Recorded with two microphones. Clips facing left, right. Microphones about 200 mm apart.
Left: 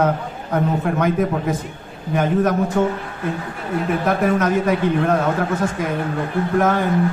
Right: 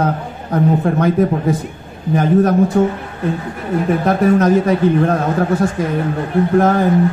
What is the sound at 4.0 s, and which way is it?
A man's voice, 35° right (ahead or behind).